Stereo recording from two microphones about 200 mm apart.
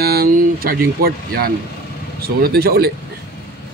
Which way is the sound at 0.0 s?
50° right (ahead or behind).